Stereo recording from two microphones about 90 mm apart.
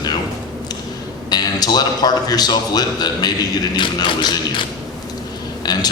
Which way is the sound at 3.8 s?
55° left (ahead or behind).